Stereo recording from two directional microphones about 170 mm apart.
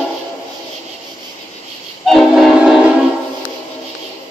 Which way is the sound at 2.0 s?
Centre (ahead or behind).